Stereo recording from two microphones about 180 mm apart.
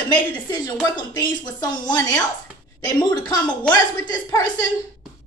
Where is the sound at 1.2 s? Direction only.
25° left (ahead or behind).